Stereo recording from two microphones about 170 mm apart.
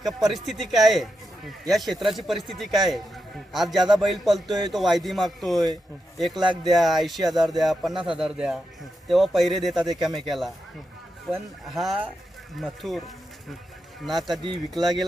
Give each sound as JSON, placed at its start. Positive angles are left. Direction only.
{"t": 0.0, "sound": "a man's voice", "side_deg": 0}
{"t": 3.8, "sound": "a man's voice", "side_deg": -25}
{"t": 4.0, "sound": "a man's voice", "side_deg": 0}
{"t": 14.0, "sound": "a man's voice", "side_deg": 0}